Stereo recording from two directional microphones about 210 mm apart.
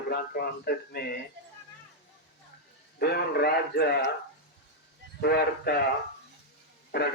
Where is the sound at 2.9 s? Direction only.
50° left (ahead or behind).